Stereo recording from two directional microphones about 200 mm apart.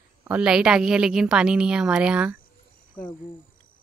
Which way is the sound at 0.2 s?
5° right (ahead or behind).